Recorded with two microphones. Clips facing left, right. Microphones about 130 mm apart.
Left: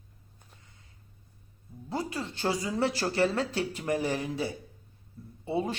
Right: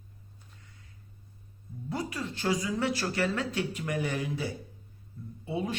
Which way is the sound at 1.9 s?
25° left (ahead or behind).